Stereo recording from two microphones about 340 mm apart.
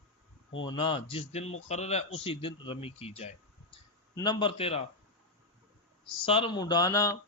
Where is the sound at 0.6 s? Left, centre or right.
Centre.